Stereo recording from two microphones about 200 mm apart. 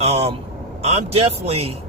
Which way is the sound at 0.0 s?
30° right (ahead or behind).